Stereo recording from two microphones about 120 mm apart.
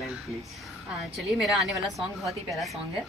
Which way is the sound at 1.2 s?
Centre (ahead or behind).